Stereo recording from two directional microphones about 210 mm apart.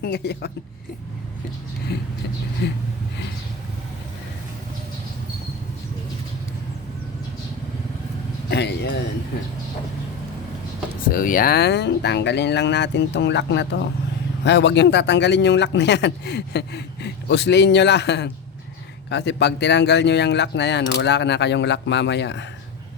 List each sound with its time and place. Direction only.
0.0 s a woman's voice: 50° left (ahead or behind)
1.9 s a woman's voice: 50° left (ahead or behind)
8.4 s a man's voice: 55° left (ahead or behind)
11.0 s speech: 40° left (ahead or behind)